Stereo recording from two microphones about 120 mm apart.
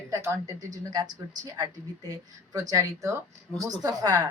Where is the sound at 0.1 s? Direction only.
25° right (ahead or behind).